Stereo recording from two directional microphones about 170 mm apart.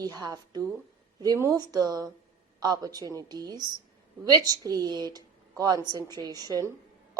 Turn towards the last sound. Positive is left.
turn(degrees=-20)  # may be behind; listen again after turning